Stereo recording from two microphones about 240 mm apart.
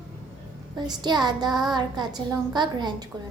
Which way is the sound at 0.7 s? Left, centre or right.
Centre.